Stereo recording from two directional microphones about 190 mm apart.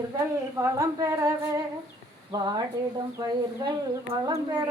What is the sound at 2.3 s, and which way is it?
Speech, 20° right (ahead or behind).